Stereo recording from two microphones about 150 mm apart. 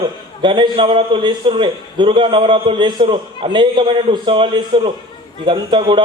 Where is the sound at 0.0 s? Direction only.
30° right (ahead or behind).